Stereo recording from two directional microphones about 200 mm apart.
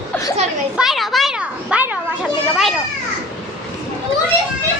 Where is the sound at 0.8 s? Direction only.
Centre (ahead or behind).